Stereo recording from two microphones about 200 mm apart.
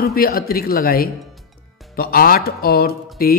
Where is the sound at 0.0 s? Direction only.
50° left (ahead or behind).